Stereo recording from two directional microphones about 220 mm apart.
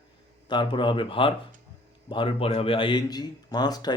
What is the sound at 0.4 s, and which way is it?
Speech, 20° left (ahead or behind).